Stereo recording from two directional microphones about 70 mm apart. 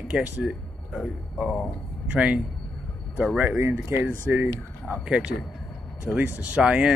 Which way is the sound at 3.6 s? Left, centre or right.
Right.